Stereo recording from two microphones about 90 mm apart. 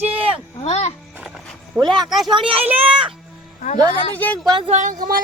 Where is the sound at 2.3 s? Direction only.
80° right.